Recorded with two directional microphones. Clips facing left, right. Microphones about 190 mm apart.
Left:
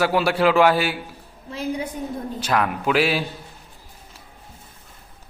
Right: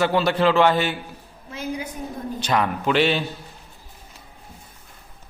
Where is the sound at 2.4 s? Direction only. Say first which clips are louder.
Even; 5° left (ahead or behind).